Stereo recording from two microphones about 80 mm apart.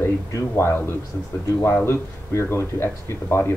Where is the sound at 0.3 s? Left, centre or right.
Left.